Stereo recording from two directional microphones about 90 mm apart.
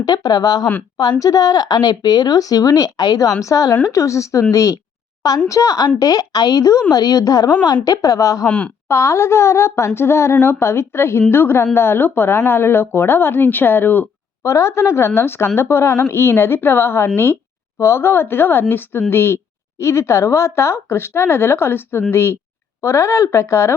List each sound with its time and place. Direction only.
0.0 s a woman's voice: 45° left (ahead or behind)
8.4 s speech: 15° left (ahead or behind)
8.9 s a woman's voice: 30° left (ahead or behind)